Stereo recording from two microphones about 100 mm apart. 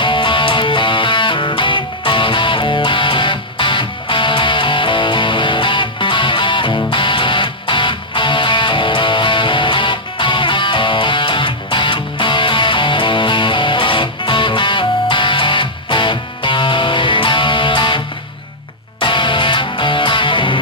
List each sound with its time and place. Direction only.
0.0 s music: 55° left (ahead or behind)